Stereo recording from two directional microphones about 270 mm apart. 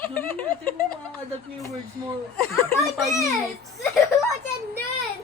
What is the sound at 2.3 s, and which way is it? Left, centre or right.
Speech, centre.